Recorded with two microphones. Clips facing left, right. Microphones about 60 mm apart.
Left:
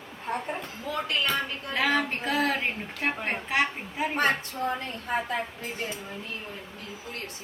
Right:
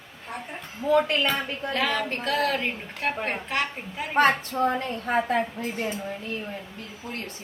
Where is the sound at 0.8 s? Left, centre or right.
Right.